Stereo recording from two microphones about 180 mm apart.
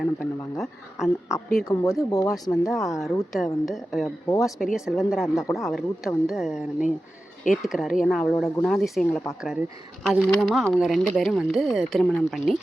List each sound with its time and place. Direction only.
0.0 s speech: 5° left (ahead or behind)
1.6 s speech: 20° left (ahead or behind)
2.5 s speech: centre (ahead or behind)